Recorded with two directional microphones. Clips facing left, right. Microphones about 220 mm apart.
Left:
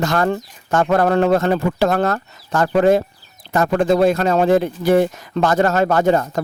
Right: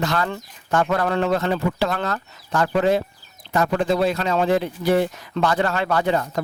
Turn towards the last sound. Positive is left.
turn(degrees=45)  # may be behind; listen again after turning